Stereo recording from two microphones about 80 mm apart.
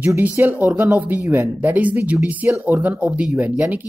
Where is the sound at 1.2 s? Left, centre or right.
Right.